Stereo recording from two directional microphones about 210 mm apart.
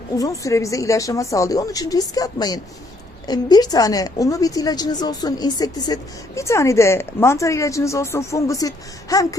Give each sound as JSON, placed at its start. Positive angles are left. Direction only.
{"t": 0.2, "sound": "a woman's voice", "side_deg": 15}